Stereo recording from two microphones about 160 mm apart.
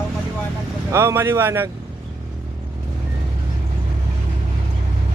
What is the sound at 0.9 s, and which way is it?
Speech, 15° right (ahead or behind).